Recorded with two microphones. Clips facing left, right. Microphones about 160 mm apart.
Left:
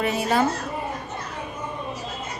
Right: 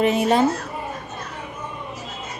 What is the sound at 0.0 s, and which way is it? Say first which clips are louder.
Speech: right 4 dB; 20° right (ahead or behind).